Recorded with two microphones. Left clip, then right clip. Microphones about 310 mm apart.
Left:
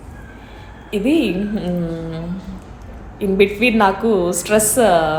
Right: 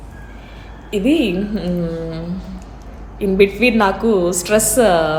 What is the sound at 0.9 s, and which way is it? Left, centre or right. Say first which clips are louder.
A woman's voice: right 1 dB; centre.